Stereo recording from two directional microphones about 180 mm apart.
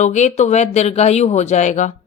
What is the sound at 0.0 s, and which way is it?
Speech, 40° left (ahead or behind).